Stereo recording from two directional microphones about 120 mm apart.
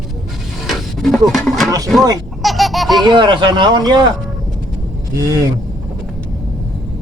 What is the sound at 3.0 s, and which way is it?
Speech, 40° right (ahead or behind).